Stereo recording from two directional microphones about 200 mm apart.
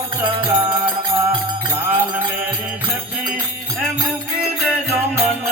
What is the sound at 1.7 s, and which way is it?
Music, 10° right (ahead or behind).